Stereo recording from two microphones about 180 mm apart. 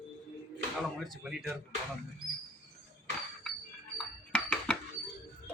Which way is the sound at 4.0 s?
5° left (ahead or behind).